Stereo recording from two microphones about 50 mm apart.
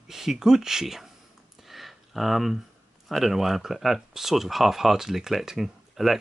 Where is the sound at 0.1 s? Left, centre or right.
Centre.